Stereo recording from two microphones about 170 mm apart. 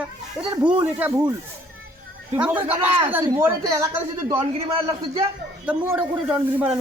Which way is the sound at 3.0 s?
10° right (ahead or behind).